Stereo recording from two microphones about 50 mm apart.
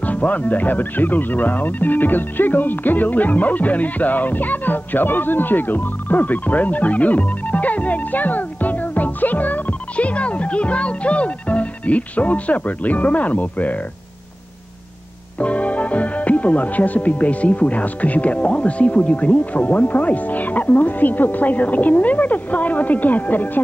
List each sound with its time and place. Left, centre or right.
0.0 s speech: left
15.3 s speech: left